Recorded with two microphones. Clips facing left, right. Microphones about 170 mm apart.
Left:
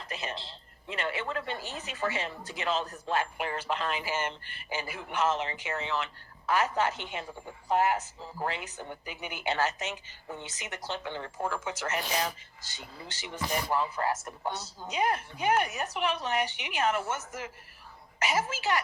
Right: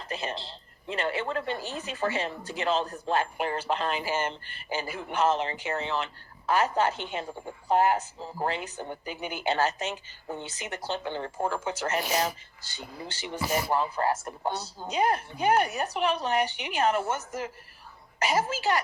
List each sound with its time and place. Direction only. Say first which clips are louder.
0.1 s speech: right 4 dB; 30° right (ahead or behind)
13.4 s speech: right 3 dB; 10° right (ahead or behind)
13.7 s speech: right 1 dB; 35° right (ahead or behind)